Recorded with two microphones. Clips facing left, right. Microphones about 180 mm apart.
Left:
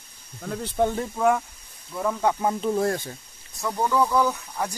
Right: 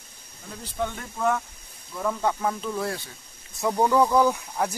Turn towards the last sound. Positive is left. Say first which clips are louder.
# right 3 dB
turn(degrees=-10)  # may be behind; listen again after turning